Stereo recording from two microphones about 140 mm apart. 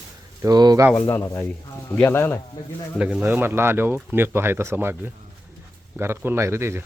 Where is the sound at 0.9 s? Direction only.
15° left (ahead or behind).